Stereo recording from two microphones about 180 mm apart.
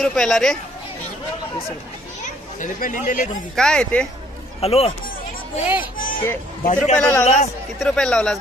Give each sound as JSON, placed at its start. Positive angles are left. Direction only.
{"t": 0.0, "sound": "speech", "side_deg": 0}
{"t": 2.6, "sound": "speech", "side_deg": 45}
{"t": 3.5, "sound": "speech", "side_deg": 5}
{"t": 4.6, "sound": "speech", "side_deg": 35}
{"t": 5.9, "sound": "hubbub", "side_deg": 50}
{"t": 6.6, "sound": "speech", "side_deg": 45}
{"t": 7.0, "sound": "a man's voice", "side_deg": 10}